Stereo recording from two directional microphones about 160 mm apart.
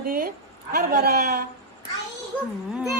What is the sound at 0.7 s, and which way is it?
Speech, 80° right.